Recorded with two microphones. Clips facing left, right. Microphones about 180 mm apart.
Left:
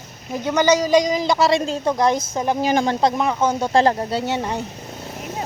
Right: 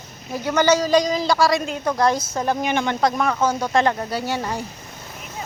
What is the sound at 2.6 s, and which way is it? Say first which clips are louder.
Speech: left 3 dB; 35° left (ahead or behind).